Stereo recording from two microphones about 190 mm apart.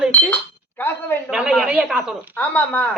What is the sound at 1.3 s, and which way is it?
Speech, 5° right (ahead or behind).